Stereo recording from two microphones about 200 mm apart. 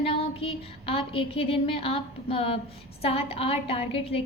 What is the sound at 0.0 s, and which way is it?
A woman's voice, 30° left (ahead or behind).